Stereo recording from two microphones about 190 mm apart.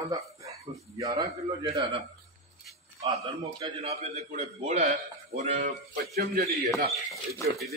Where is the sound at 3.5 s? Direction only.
30° right (ahead or behind).